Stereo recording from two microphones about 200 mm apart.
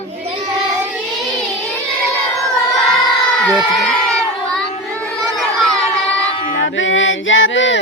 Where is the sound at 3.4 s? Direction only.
5° left (ahead or behind).